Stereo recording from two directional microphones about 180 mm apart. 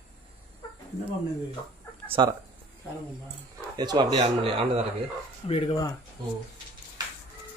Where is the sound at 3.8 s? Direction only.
20° right (ahead or behind).